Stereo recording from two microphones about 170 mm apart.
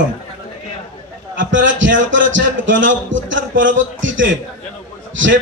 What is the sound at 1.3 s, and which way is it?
A man's voice, 90° right.